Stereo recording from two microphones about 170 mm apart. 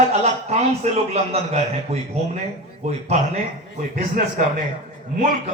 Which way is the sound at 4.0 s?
55° right (ahead or behind).